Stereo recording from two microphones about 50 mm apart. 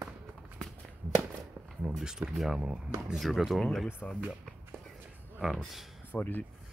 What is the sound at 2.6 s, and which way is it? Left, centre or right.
Speech, centre.